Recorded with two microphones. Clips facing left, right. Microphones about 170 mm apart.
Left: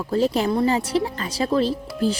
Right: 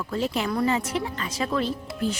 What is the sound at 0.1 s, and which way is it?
Speech, 35° left (ahead or behind).